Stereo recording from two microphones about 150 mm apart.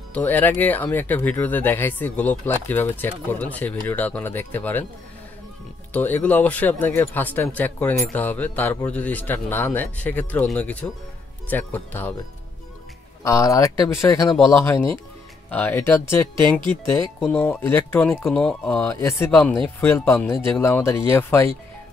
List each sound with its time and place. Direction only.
0.1 s speech: 10° left (ahead or behind)
5.9 s speech: 10° left (ahead or behind)
13.2 s speech: 20° left (ahead or behind)